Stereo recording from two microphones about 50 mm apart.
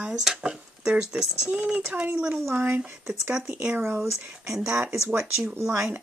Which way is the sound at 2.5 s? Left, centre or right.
Right.